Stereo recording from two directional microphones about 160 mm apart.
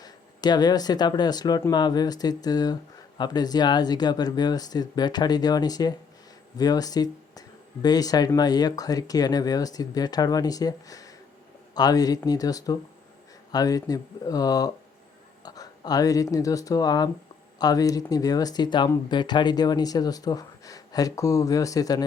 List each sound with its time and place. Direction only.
0.0 s speech: 25° left (ahead or behind)